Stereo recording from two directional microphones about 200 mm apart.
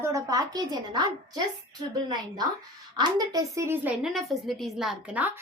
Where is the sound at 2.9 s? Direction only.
20° right (ahead or behind).